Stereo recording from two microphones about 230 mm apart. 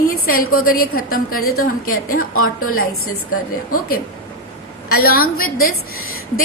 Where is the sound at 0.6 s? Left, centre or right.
Left.